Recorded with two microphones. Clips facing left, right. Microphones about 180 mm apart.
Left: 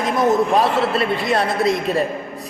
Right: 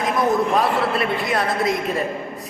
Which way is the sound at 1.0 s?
25° left (ahead or behind).